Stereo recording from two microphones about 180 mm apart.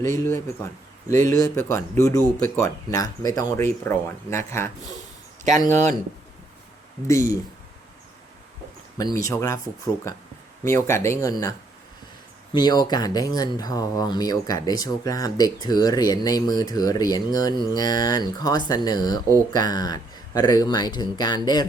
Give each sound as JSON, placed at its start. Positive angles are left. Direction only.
{"t": 0.0, "sound": "a man's voice", "side_deg": 15}
{"t": 5.6, "sound": "speech", "side_deg": -40}
{"t": 7.1, "sound": "a man's voice", "side_deg": 15}
{"t": 9.0, "sound": "a man's voice", "side_deg": 20}
{"t": 12.5, "sound": "speech", "side_deg": 20}